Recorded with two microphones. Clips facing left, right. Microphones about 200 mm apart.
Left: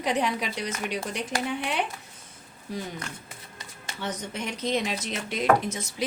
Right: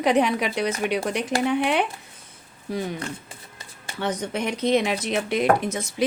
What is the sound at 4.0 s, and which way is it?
Speech, 60° right (ahead or behind).